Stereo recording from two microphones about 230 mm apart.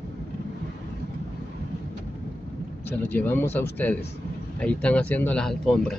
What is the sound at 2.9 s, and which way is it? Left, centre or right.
A man's voice, centre.